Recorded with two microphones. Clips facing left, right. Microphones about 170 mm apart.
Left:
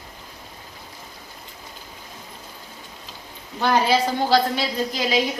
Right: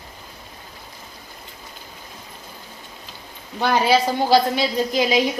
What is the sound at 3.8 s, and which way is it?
A woman's voice, 15° right (ahead or behind).